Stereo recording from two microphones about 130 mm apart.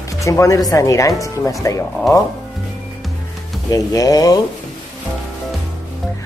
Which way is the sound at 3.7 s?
25° left (ahead or behind).